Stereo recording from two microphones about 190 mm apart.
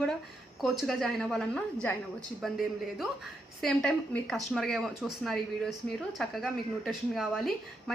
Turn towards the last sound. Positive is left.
turn(degrees=0)  # may be behind; listen again after turning